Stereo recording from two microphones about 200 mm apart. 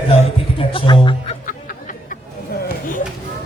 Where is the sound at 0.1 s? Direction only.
30° left (ahead or behind).